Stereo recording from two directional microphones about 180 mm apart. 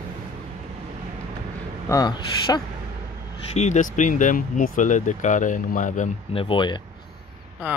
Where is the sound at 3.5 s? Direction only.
40° left (ahead or behind).